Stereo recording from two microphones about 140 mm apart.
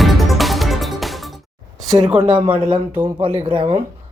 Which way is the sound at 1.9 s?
35° right (ahead or behind).